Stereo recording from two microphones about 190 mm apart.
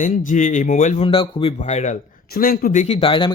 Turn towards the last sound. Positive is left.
turn(degrees=30)  # may be behind; listen again after turning